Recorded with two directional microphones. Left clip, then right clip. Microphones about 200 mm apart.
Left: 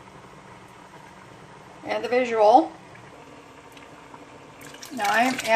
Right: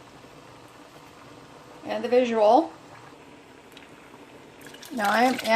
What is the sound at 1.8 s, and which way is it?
Speech, centre (ahead or behind).